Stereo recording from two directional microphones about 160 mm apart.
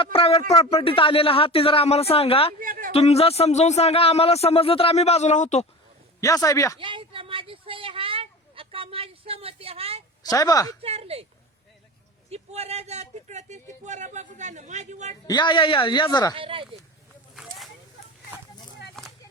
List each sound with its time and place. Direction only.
0.0 s a man's voice: 35° left (ahead or behind)
2.6 s a sound: 60° right (ahead or behind)
2.9 s a man's voice: 40° left (ahead or behind)
6.1 s a man's voice: 20° left (ahead or behind)
6.7 s a sound: 30° right (ahead or behind)
10.2 s a man's voice: 20° left (ahead or behind)
10.8 s speech: 40° right (ahead or behind)
12.3 s a man's voice: 40° right (ahead or behind)
15.3 s a man's voice: 30° left (ahead or behind)
16.3 s speech: 35° right (ahead or behind)
19.0 s a sound: centre (ahead or behind)